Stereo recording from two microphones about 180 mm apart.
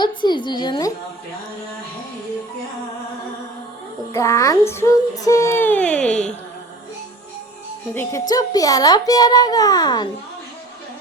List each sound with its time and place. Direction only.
0.0 s speech: 25° left (ahead or behind)
4.1 s child singing: 15° left (ahead or behind)
8.3 s speech: 20° left (ahead or behind)